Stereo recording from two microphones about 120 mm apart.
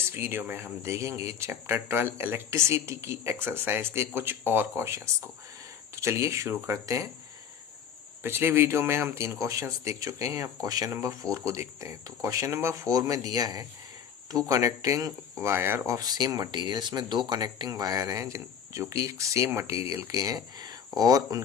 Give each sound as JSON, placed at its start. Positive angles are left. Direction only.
{"t": 0.0, "sound": "speech", "side_deg": -20}
{"t": 8.2, "sound": "speech", "side_deg": -20}
{"t": 16.0, "sound": "speech", "side_deg": -30}